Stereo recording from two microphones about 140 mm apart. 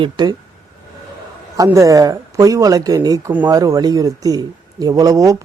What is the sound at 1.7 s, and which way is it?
Speech, 25° right (ahead or behind).